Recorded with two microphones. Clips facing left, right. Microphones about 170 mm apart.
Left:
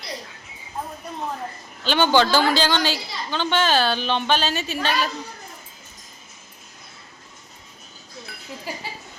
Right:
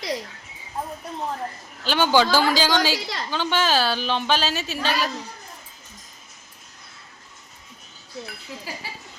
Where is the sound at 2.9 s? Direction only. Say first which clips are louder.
Right 3 dB; 90° right.